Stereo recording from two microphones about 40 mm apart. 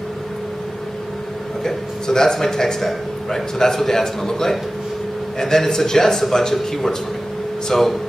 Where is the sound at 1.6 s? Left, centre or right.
Centre.